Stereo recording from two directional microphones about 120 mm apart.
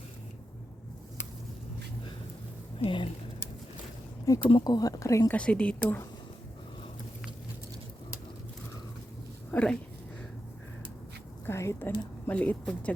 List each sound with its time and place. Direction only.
2.7 s speech: 45° left (ahead or behind)
4.4 s speech: 40° left (ahead or behind)
5.3 s speech: 10° left (ahead or behind)
9.5 s speech: 10° left (ahead or behind)
11.4 s speech: 25° left (ahead or behind)